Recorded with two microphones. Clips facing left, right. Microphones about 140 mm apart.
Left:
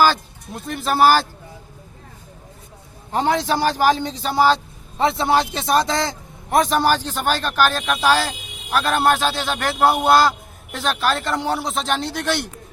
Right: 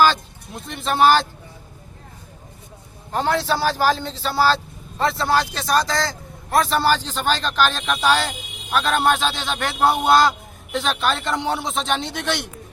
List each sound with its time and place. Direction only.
0.0 s speech: 5° left (ahead or behind)
3.1 s a man's voice: 15° left (ahead or behind)